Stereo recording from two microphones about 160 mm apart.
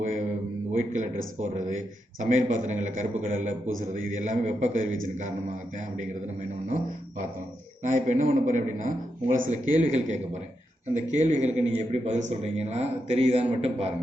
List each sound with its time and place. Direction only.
0.0 s a sound: 50° right (ahead or behind)
0.8 s a man's voice: 50° right (ahead or behind)
7.9 s a man's voice: 50° right (ahead or behind)